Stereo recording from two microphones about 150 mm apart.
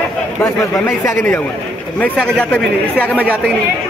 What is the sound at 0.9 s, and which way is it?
Speech, 15° left (ahead or behind).